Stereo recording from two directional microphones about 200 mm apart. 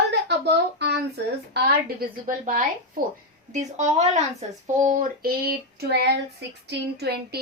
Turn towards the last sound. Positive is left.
turn(degrees=-55)  # may be behind; listen again after turning